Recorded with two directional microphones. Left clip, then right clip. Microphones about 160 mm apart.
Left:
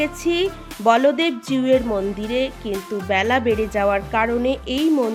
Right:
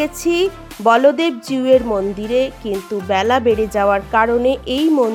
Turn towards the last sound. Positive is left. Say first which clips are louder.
# right 4 dB
turn(degrees=-25)  # may be behind; listen again after turning